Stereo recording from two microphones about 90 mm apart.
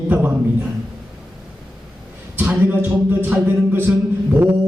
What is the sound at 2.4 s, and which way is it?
Speech, 20° right (ahead or behind).